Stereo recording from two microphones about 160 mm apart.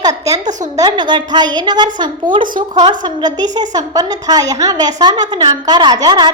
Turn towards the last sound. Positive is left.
turn(degrees=-25)  # may be behind; listen again after turning